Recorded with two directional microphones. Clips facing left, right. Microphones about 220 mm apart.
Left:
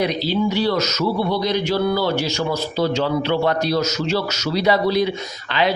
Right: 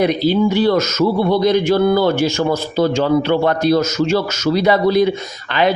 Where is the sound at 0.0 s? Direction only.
50° right (ahead or behind).